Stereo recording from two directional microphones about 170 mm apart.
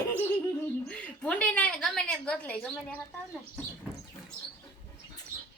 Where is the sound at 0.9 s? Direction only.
10° left (ahead or behind).